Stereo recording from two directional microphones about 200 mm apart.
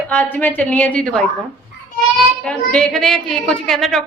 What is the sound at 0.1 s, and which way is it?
A woman's voice, 10° left (ahead or behind).